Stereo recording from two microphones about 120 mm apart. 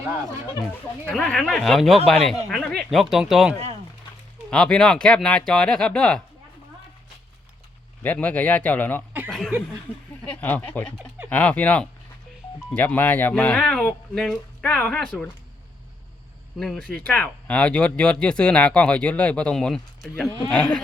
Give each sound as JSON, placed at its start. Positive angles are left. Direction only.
{"t": 1.1, "sound": "speech", "side_deg": 5}
{"t": 4.5, "sound": "speech", "side_deg": 5}
{"t": 8.0, "sound": "speech", "side_deg": 15}
{"t": 9.5, "sound": "speech", "side_deg": -20}
{"t": 9.9, "sound": "speech", "side_deg": 15}
{"t": 16.6, "sound": "speech", "side_deg": 5}